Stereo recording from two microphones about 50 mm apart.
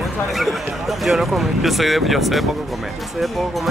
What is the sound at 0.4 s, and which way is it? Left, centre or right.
Speech, centre.